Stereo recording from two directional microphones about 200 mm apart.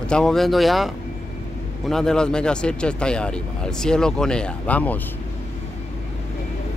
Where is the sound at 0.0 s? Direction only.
5° left (ahead or behind).